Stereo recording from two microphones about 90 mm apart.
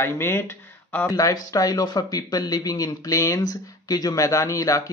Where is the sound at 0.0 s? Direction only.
25° left (ahead or behind).